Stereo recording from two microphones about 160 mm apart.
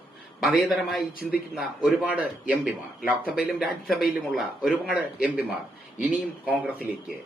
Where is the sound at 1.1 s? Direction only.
70° left (ahead or behind).